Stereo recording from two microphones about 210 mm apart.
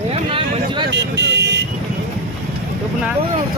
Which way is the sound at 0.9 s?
55° right (ahead or behind).